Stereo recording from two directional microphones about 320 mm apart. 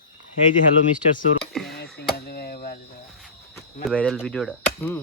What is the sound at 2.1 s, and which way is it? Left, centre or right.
Chop, left.